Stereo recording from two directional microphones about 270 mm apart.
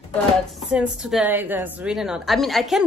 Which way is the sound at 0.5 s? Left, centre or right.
Centre.